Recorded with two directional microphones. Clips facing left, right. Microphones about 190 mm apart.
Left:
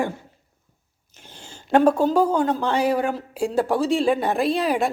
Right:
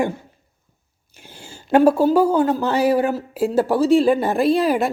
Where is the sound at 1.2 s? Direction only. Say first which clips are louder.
Right 3 dB; 10° right (ahead or behind).